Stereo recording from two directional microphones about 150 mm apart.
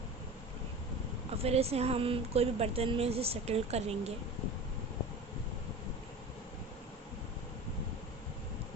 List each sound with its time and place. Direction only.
1.4 s a woman's voice: 45° right (ahead or behind)